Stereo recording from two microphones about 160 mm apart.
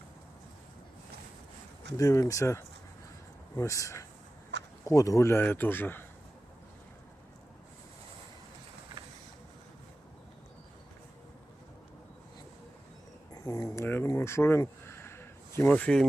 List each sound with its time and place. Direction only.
2.0 s speech: 20° left (ahead or behind)
4.5 s a sound: 90° right
4.9 s speech: 20° left (ahead or behind)
13.3 s speech: 20° left (ahead or behind)